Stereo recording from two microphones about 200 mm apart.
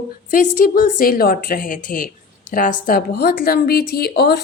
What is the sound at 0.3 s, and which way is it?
Speech, 45° left (ahead or behind).